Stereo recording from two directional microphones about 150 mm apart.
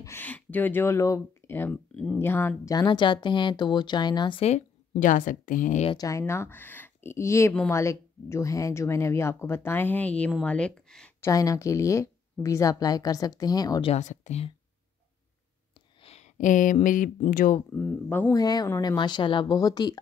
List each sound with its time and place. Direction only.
0.0 s speech: 15° left (ahead or behind)
2.7 s speech: 30° left (ahead or behind); by 5.9 s 60° left (ahead or behind)
5.9 s speech: 20° left (ahead or behind); by 11.1 s 5° left (ahead or behind)
11.1 s a woman's voice: 20° left (ahead or behind)
13.8 s speech: 50° left (ahead or behind)
16.0 s speech: 45° left (ahead or behind); by 17.6 s 65° left (ahead or behind)
17.7 s speech: 10° left (ahead or behind)
18.3 s a woman's voice: 25° left (ahead or behind)